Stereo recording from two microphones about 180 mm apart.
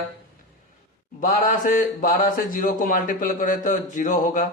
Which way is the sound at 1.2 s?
45° left (ahead or behind).